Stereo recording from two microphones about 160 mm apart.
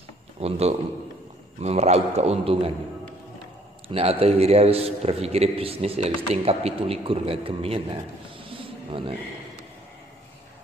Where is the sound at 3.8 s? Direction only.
35° right (ahead or behind).